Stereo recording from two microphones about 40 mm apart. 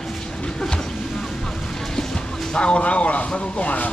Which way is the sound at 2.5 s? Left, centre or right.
Left.